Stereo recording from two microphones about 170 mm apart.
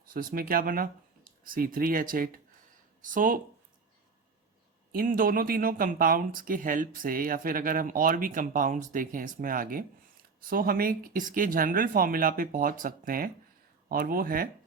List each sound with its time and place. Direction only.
0.1 s speech: 55° right (ahead or behind)
4.9 s speech: 55° right (ahead or behind)